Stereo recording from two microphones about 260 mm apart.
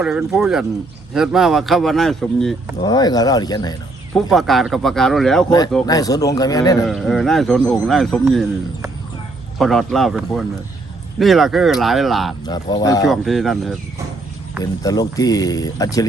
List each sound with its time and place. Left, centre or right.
0.0 s speech: centre
2.8 s speech: centre
4.1 s speech: centre
5.5 s speech: centre
6.8 s speech: centre
9.6 s speech: centre
12.5 s speech: centre
13.1 s speech: centre
14.6 s speech: centre